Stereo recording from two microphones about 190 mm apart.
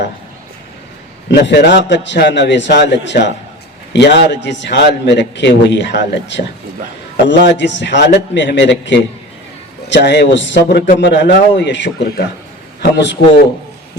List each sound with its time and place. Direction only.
1.3 s a man's voice: 65° left (ahead or behind)